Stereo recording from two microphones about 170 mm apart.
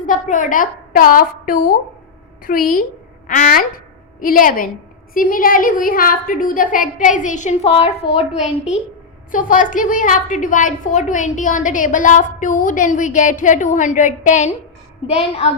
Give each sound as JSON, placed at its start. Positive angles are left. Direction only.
{"t": 0.0, "sound": "a woman's voice", "side_deg": 50}
{"t": 8.2, "sound": "a woman's voice", "side_deg": -5}
{"t": 9.3, "sound": "a woman's voice", "side_deg": 50}